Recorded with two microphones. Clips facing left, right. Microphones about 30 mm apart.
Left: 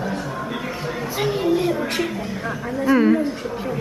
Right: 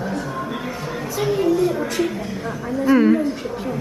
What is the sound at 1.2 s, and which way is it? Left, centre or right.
Speech, left.